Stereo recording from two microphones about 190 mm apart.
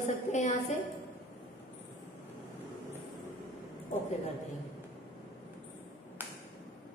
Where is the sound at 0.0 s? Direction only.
40° left (ahead or behind).